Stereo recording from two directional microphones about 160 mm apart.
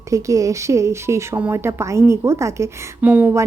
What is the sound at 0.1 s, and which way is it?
A woman's voice, 20° right (ahead or behind).